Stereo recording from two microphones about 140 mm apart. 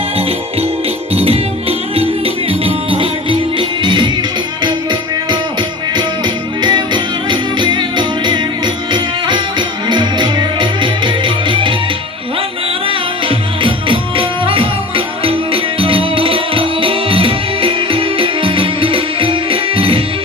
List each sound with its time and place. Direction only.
1.1 s music: 45° right (ahead or behind)
12.9 s music: 40° right (ahead or behind)